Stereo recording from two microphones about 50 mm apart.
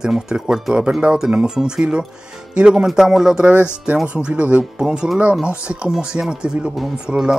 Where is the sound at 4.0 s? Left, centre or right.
Right.